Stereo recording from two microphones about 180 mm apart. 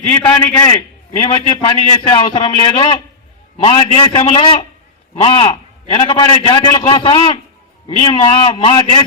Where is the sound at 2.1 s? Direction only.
35° left (ahead or behind).